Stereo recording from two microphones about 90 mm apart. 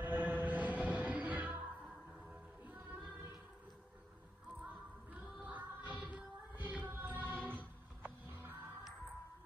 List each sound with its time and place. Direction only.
0.0 s music: 20° right (ahead or behind)
5.1 s music: 15° right (ahead or behind)